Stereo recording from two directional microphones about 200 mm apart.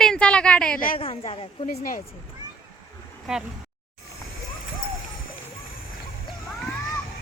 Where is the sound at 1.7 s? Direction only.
45° left (ahead or behind).